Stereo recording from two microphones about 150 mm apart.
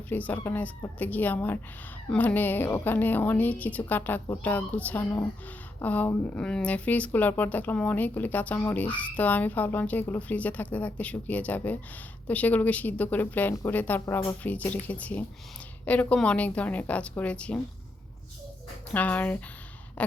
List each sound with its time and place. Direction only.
0.1 s speech: 10° left (ahead or behind)
18.9 s speech: 10° left (ahead or behind)